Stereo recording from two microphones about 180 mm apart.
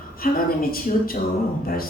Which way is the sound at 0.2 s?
55° left (ahead or behind).